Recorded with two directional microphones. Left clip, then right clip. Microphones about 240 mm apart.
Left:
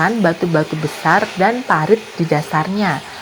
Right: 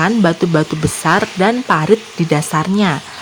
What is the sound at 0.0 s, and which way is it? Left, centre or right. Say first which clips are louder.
Speech: right 1 dB; right.